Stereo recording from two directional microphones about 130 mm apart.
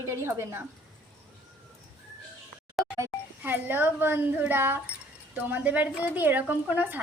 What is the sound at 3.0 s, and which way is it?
A child's voice, 15° right (ahead or behind).